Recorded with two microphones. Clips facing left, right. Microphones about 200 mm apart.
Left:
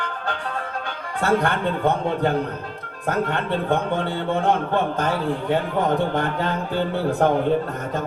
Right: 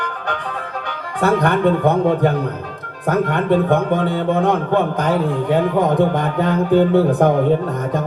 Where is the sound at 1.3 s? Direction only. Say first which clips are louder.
Right 7 dB; 15° right (ahead or behind).